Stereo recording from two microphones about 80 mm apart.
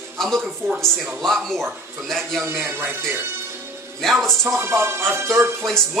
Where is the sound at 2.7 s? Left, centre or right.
Right.